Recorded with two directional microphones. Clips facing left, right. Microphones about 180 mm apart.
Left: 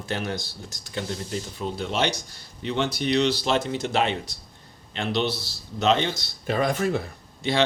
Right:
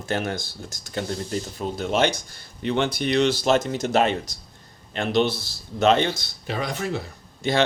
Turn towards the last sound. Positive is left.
turn(degrees=-45)  # may be behind; listen again after turning